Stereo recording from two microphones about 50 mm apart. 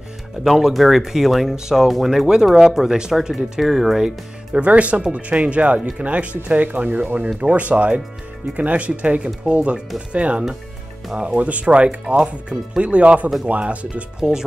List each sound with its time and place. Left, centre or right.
0.4 s speech: centre
4.6 s speech: right
5.8 s speech: centre
6.0 s speech: right